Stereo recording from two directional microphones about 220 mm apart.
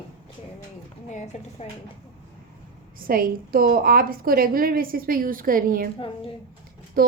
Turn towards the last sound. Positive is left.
turn(degrees=-40)  # may be behind; listen again after turning